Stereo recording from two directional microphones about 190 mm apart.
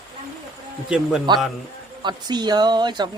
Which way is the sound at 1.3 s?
25° right (ahead or behind).